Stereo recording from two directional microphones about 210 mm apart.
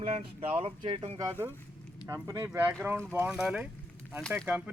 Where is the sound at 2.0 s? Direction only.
15° right (ahead or behind).